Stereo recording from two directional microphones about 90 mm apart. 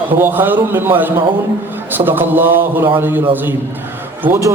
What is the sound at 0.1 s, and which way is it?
A man's voice, 20° right (ahead or behind).